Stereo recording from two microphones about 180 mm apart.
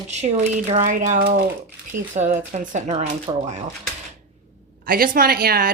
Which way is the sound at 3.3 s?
30° right (ahead or behind).